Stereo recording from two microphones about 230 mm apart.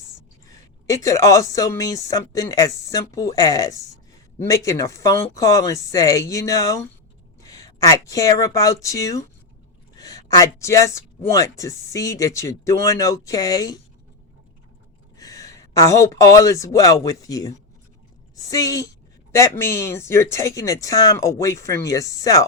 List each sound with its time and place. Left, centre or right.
0.4 s a woman's voice: centre
15.2 s speech: centre